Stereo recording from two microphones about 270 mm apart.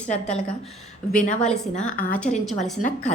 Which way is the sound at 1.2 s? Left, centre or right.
Left.